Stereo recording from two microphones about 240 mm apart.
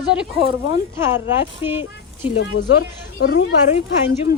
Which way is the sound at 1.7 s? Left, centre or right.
Centre.